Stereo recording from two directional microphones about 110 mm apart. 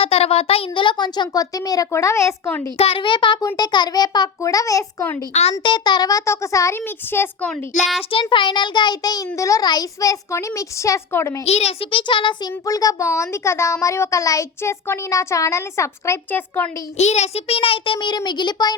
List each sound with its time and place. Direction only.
0.0 s a child's voice: 65° left (ahead or behind); by 2.3 s 25° left (ahead or behind)
2.7 s a child's voice: 60° left (ahead or behind); by 5.0 s 30° left (ahead or behind)
5.3 s a child's voice: 80° left
5.6 s a woman's voice: 40° left (ahead or behind); by 7.5 s 20° left (ahead or behind)
8.1 s a child's voice: 50° left (ahead or behind); by 11.3 s 25° left (ahead or behind)
11.4 s a child's voice: 70° left (ahead or behind); by 12.4 s 45° left (ahead or behind)
12.6 s a woman's voice: 35° left (ahead or behind)
17.0 s a child's voice: 85° left; by 18.8 s 40° left (ahead or behind)